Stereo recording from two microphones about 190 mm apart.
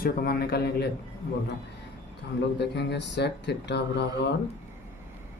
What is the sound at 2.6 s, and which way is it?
Speech, 65° left (ahead or behind).